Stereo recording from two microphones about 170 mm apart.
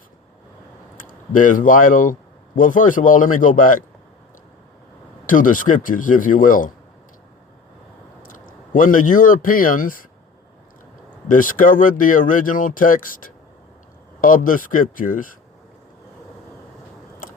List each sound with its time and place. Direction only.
0.9 s speech: 50° left (ahead or behind)
5.2 s speech: 50° left (ahead or behind)
8.7 s speech: 50° left (ahead or behind)
11.3 s speech: 50° left (ahead or behind)